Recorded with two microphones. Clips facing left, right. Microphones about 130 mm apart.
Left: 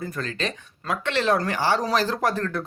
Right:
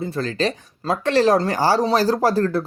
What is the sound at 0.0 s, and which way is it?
Speech, 30° right (ahead or behind).